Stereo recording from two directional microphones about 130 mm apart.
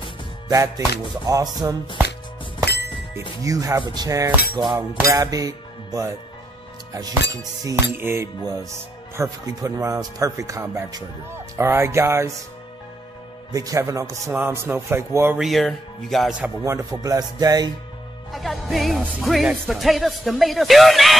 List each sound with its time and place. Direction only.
0.5 s speech: 25° right (ahead or behind)
3.4 s speech: 25° right (ahead or behind)
7.6 s speech: 15° right (ahead or behind)
13.5 s a man's voice: 25° right (ahead or behind)
15.3 s speech: centre (ahead or behind)
16.6 s speech: 25° right (ahead or behind)
18.3 s speech: centre (ahead or behind)